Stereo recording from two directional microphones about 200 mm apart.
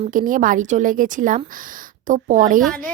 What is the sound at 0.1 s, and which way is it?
A woman's voice, 40° right (ahead or behind).